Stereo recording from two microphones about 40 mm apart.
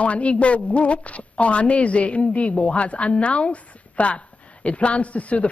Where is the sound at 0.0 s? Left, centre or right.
Left.